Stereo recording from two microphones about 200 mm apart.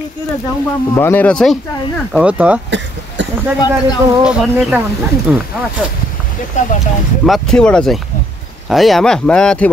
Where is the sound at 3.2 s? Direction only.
65° right (ahead or behind).